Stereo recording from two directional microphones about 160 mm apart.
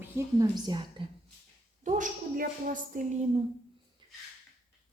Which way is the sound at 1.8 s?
50° right (ahead or behind).